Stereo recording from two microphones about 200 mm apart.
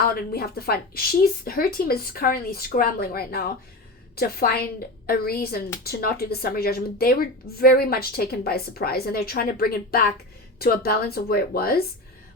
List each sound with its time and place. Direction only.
0.0 s speech: 50° left (ahead or behind)